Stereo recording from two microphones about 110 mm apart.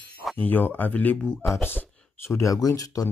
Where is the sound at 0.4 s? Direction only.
15° left (ahead or behind).